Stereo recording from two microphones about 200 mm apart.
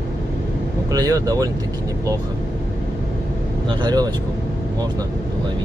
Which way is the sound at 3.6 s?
20° right (ahead or behind).